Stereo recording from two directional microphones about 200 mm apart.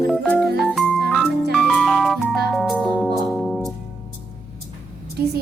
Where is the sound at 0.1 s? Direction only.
5° left (ahead or behind).